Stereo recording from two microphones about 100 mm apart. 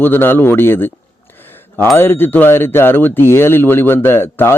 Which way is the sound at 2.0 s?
20° left (ahead or behind).